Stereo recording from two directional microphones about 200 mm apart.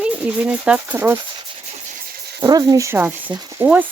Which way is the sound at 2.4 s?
20° right (ahead or behind).